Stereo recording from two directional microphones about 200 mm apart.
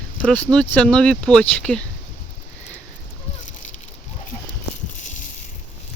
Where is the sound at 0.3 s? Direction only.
5° left (ahead or behind).